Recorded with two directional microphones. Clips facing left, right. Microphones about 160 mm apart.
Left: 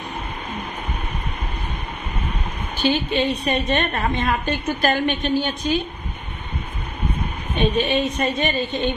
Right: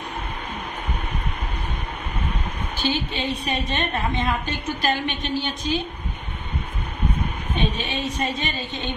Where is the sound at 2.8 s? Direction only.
60° left (ahead or behind).